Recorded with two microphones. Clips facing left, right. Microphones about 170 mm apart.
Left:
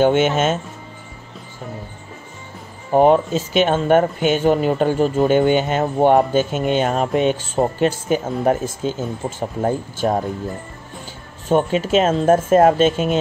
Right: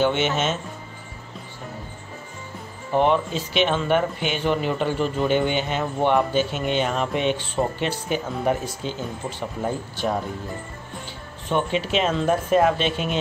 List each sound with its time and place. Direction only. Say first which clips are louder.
0.0 s speech: left 6 dB; 50° left (ahead or behind)
2.9 s speech: left 6 dB; 45° left (ahead or behind)
11.4 s speech: left 6 dB; 45° left (ahead or behind)